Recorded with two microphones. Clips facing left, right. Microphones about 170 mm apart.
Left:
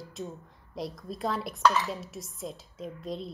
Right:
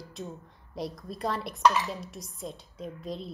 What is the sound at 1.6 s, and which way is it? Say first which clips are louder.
Dishes: right 1 dB; 15° right (ahead or behind).